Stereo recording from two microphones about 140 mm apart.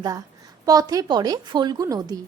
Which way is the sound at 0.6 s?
25° right (ahead or behind).